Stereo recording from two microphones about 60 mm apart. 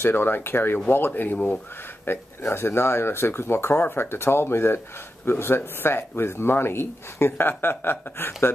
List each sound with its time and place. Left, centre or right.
0.0 s speech: left